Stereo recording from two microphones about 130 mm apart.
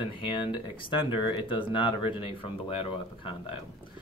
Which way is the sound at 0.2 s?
40° left (ahead or behind).